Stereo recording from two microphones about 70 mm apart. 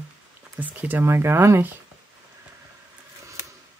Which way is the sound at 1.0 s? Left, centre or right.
Right.